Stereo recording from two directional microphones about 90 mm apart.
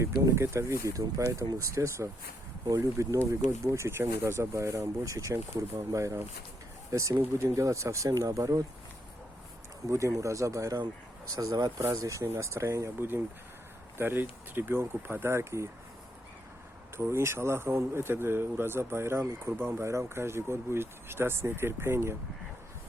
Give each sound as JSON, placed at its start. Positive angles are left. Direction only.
{"t": 0.0, "sound": "speech", "side_deg": -30}
{"t": 9.9, "sound": "speech", "side_deg": -35}
{"t": 17.0, "sound": "speech", "side_deg": -30}